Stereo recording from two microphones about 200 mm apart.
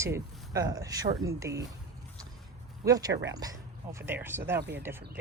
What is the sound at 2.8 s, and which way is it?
A woman's voice, 20° right (ahead or behind).